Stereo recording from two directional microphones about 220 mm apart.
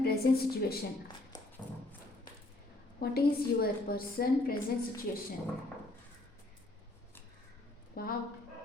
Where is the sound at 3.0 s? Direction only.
45° left (ahead or behind).